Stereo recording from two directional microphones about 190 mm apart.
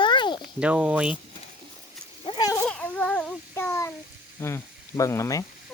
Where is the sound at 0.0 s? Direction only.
25° left (ahead or behind).